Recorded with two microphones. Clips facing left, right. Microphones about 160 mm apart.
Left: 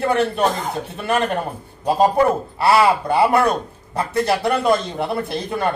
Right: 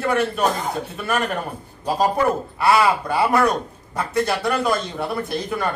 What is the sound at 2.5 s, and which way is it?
Speech, 30° left (ahead or behind).